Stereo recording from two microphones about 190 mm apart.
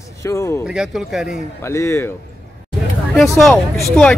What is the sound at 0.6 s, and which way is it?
Speech, 5° right (ahead or behind).